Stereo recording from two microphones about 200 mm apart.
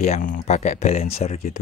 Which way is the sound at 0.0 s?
40° left (ahead or behind).